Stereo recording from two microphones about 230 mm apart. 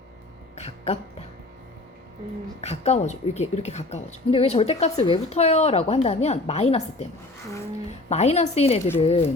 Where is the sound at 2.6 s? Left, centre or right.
Left.